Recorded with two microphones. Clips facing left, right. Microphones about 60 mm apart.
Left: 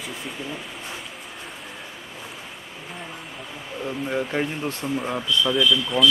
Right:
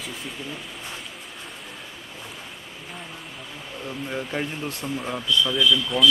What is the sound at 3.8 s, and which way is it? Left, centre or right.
Speech, centre.